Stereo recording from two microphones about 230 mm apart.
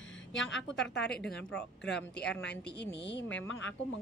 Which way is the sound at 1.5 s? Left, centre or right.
Centre.